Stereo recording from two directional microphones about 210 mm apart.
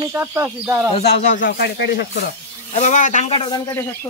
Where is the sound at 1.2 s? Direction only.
35° left (ahead or behind).